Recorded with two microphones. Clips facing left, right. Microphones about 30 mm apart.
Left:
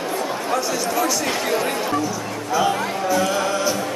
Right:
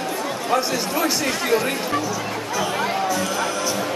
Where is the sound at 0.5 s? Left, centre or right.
Right.